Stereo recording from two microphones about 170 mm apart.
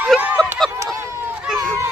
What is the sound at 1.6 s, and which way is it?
Children playing, 15° right (ahead or behind).